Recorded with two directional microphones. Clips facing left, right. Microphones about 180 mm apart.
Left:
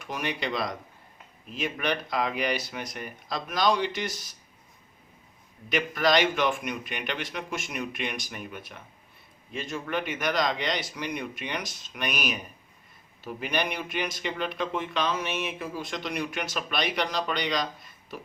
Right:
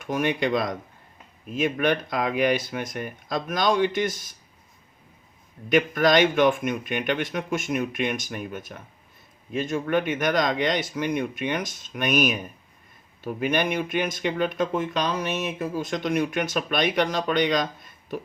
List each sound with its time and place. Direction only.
0.0 s speech: 50° right (ahead or behind)
5.6 s speech: 50° right (ahead or behind)